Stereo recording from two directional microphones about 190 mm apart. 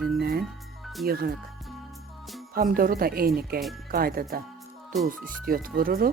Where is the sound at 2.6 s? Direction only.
45° right (ahead or behind).